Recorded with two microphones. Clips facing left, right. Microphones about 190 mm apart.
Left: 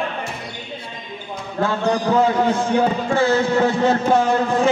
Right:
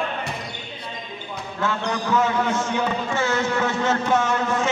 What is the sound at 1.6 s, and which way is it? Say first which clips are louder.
Speech: left 6 dB; 35° left (ahead or behind).